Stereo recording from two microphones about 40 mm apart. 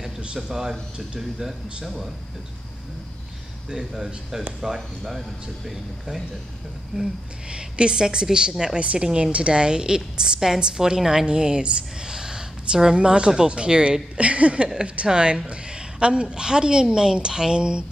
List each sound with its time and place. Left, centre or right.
0.5 s a woman's voice: centre
1.9 s speech: centre
3.7 s speech: centre
7.0 s a woman's voice: right
8.7 s a woman's voice: right